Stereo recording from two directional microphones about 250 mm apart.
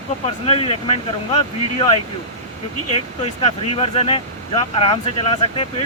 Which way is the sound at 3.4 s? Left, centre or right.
Left.